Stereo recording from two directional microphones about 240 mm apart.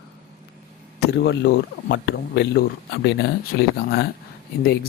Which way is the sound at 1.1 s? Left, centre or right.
Left.